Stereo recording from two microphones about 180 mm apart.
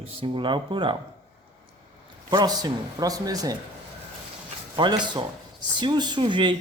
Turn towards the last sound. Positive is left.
turn(degrees=-25)  # may be behind; listen again after turning